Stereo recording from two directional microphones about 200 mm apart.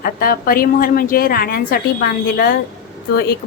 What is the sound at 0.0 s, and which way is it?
A woman's voice, 45° left (ahead or behind).